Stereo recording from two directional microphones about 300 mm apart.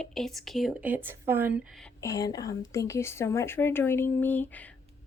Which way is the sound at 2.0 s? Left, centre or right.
Centre.